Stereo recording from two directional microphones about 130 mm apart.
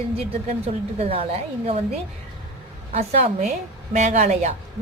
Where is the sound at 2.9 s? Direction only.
60° right (ahead or behind).